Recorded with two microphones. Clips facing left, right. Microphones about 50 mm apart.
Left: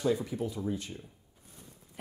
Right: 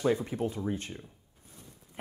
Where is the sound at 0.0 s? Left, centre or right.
Right.